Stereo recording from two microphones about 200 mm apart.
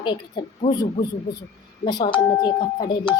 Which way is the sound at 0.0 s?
25° left (ahead or behind).